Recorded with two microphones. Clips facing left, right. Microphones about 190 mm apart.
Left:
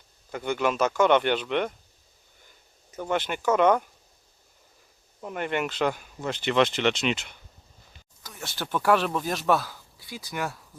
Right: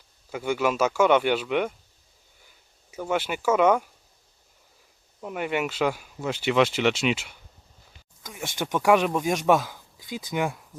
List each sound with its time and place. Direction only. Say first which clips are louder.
0.3 s speech: right 1 dB; 5° right (ahead or behind)
2.9 s speech: right 1 dB; 5° right (ahead or behind)
5.2 s speech: right 1 dB; 5° right (ahead or behind)
8.4 s speech: right 3 dB; 15° right (ahead or behind)